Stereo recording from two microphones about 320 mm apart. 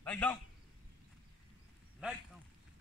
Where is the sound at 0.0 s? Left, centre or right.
Centre.